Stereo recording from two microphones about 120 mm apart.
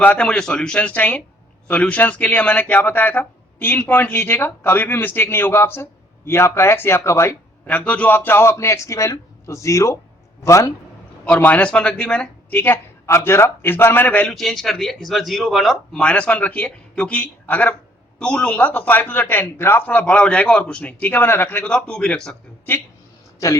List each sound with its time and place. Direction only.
0.0 s a man's voice: 10° left (ahead or behind)
11.3 s a man's voice: 15° left (ahead or behind)
14.3 s a man's voice: centre (ahead or behind)